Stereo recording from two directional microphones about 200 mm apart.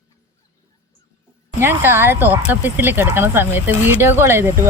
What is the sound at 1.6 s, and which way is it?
Speech, 10° right (ahead or behind).